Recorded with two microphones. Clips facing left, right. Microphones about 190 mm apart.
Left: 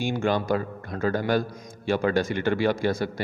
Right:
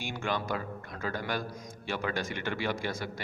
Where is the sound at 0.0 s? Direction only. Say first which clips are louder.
Left 9 dB; 35° left (ahead or behind).